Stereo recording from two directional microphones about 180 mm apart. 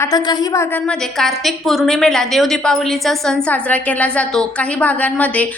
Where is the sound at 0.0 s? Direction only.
20° left (ahead or behind).